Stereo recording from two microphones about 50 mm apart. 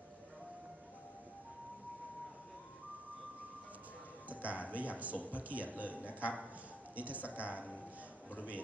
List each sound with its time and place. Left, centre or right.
4.3 s a man's voice: right
7.4 s a man's voice: left